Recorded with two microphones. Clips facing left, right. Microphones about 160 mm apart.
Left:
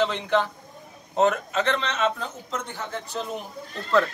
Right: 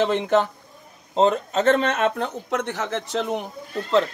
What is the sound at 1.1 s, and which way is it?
Speech, 30° right (ahead or behind).